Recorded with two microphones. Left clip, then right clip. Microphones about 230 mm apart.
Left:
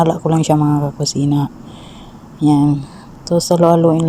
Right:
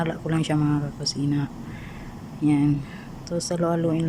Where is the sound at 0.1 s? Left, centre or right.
Centre.